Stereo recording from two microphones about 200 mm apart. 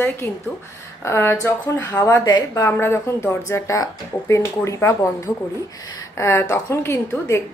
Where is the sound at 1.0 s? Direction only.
15° left (ahead or behind).